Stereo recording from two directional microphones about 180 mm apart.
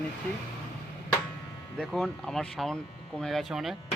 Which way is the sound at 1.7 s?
Centre (ahead or behind).